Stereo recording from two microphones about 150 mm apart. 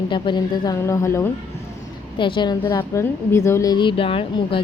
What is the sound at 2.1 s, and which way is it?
A woman's voice, 35° left (ahead or behind).